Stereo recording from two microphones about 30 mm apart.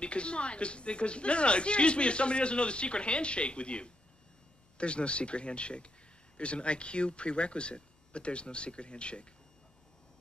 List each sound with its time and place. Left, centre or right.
0.0 s speech: left